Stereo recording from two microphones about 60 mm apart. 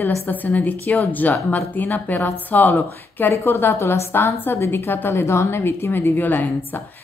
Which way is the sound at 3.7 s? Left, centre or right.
Left.